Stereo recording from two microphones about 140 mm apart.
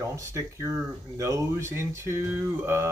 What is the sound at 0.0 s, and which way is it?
Speech, 20° right (ahead or behind).